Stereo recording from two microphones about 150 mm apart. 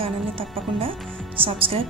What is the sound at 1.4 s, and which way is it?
Speech, 40° right (ahead or behind).